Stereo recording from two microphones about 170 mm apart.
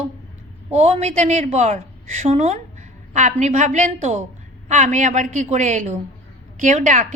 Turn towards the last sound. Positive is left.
turn(degrees=-45)  # may be behind; listen again after turning